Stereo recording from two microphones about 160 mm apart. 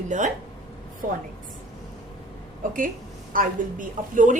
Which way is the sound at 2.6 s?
55° right (ahead or behind).